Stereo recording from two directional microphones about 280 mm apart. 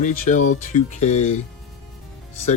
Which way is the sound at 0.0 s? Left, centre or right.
Left.